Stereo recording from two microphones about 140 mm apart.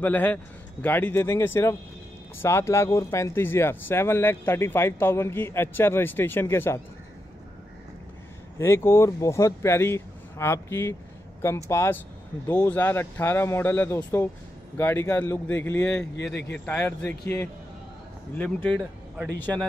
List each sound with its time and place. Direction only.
0.0 s speech: 10° left (ahead or behind)
8.5 s speech: 20° left (ahead or behind)